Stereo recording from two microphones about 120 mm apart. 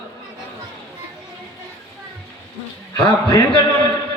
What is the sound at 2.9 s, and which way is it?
Speech, 25° left (ahead or behind).